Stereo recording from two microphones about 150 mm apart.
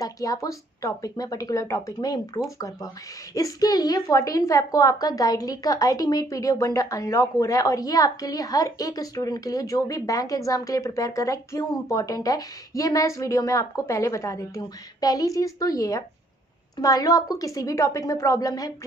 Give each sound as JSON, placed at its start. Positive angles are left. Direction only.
{"t": 0.0, "sound": "a woman's voice", "side_deg": 20}